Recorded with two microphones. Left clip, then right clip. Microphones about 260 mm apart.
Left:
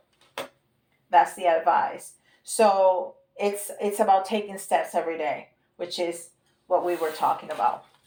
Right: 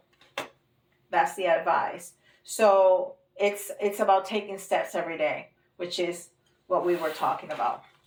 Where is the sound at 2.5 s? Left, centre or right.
Left.